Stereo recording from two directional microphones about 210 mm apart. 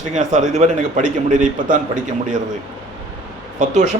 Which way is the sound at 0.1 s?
35° right (ahead or behind).